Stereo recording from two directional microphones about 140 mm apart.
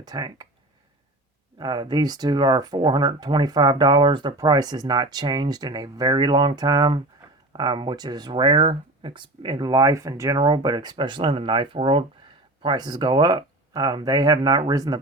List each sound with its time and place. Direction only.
0.0 s speech: 30° right (ahead or behind)
1.5 s speech: 30° right (ahead or behind)